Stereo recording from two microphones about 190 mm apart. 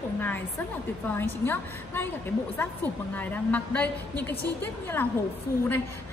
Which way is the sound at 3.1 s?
10° left (ahead or behind).